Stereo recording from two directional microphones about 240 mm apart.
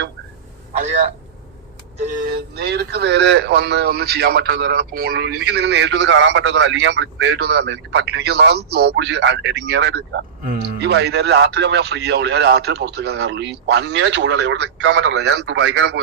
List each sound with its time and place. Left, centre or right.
0.7 s a man's voice: right